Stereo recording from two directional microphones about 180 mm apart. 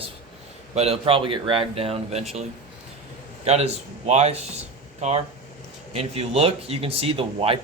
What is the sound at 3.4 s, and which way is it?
Speech, 35° right (ahead or behind).